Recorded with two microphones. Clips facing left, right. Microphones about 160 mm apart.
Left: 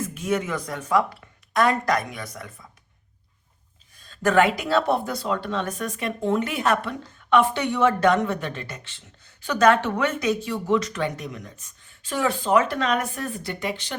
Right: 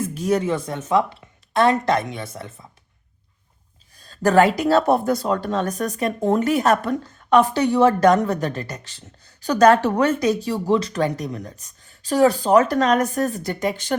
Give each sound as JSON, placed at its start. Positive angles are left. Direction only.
{"t": 0.0, "sound": "a woman's voice", "side_deg": -35}
{"t": 3.9, "sound": "speech", "side_deg": -40}